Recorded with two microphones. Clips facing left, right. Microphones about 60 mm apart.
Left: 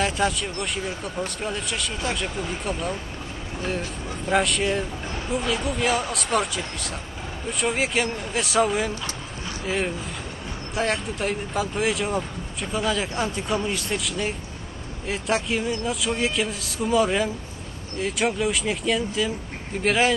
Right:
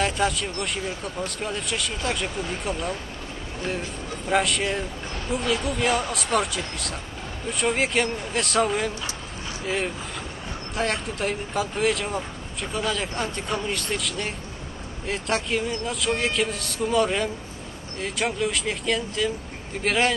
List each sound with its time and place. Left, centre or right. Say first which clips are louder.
0.0 s speech: even; centre
4.3 s speech: left 1 dB; centre
10.7 s speech: left 1 dB; centre